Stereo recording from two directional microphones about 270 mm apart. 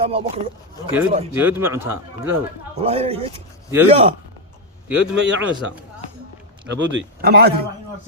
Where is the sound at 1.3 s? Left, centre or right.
Centre.